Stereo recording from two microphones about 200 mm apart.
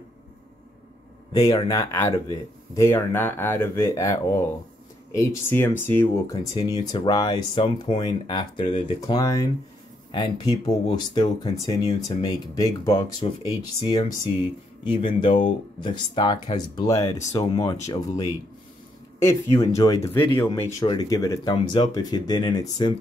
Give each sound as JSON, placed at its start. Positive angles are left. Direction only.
{"t": 1.3, "sound": "speech", "side_deg": 25}
{"t": 15.0, "sound": "speech", "side_deg": 25}